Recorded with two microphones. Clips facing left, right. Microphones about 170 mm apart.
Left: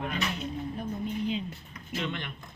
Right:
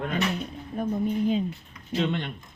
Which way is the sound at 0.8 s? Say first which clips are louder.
Right 10 dB; 50° right (ahead or behind).